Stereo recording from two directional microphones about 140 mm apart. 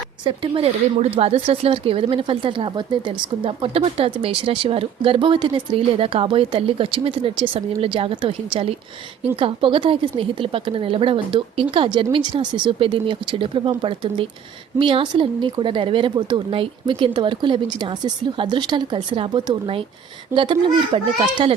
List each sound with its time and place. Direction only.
0.3 s speech: 45° right (ahead or behind)
3.4 s speech: 45° right (ahead or behind)